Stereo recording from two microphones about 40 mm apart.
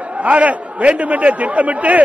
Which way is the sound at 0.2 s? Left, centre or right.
Right.